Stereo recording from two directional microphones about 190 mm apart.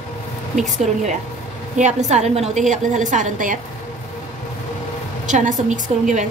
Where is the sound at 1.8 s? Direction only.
40° right (ahead or behind).